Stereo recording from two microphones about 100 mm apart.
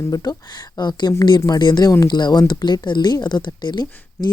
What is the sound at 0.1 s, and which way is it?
A woman's voice, 40° left (ahead or behind).